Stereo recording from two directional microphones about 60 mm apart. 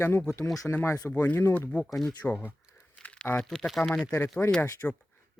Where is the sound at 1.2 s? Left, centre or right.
Left.